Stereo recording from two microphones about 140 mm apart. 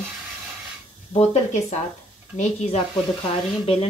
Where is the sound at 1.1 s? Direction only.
50° left (ahead or behind).